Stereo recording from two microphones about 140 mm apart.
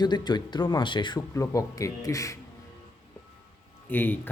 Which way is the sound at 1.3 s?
20° left (ahead or behind).